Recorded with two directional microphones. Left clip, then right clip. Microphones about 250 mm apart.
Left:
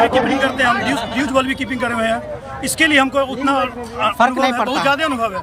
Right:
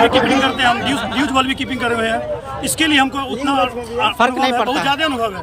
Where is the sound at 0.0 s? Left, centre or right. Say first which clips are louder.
Right 1 dB; left.